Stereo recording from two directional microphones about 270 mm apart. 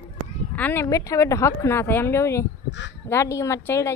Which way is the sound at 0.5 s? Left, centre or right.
Centre.